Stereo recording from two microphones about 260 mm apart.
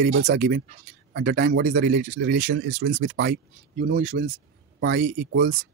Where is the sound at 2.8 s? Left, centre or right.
Right.